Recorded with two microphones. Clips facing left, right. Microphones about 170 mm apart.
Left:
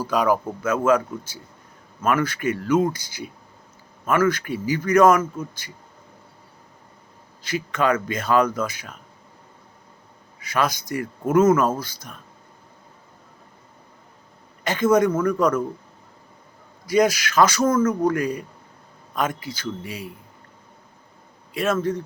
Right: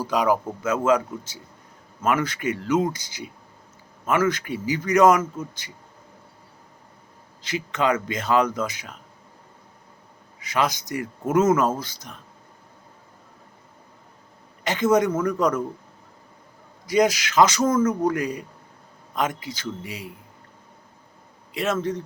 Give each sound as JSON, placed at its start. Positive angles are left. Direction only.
{"t": 0.0, "sound": "a man's voice", "side_deg": -20}
{"t": 7.4, "sound": "a man's voice", "side_deg": -20}
{"t": 10.4, "sound": "a man's voice", "side_deg": -20}
{"t": 14.6, "sound": "a man's voice", "side_deg": -20}
{"t": 16.8, "sound": "a man's voice", "side_deg": -20}
{"t": 21.5, "sound": "a man's voice", "side_deg": -20}